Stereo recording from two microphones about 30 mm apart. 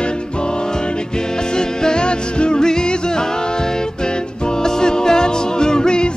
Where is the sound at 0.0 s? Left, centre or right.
Left.